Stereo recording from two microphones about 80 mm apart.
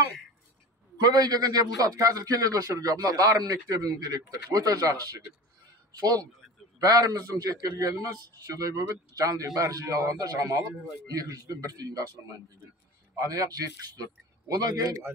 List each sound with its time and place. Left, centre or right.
0.9 s a man's voice: right
5.9 s a man's voice: right
13.1 s a man's voice: right